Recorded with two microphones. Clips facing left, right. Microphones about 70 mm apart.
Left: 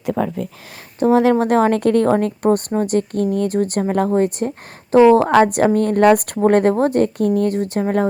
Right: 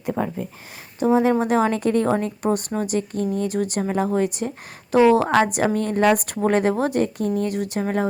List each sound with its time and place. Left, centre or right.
1.1 s a woman's voice: left
3.5 s a woman's voice: left
7.5 s speech: left